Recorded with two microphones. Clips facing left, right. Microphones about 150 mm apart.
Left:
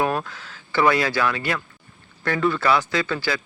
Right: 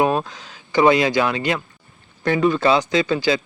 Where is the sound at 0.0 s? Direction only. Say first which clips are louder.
Right 4 dB; 20° right (ahead or behind).